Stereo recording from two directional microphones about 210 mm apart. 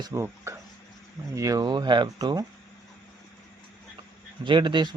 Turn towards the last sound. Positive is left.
turn(degrees=-20)  # may be behind; listen again after turning